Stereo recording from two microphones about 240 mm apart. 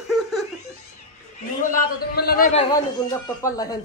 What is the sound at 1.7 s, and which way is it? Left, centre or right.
Speech, left.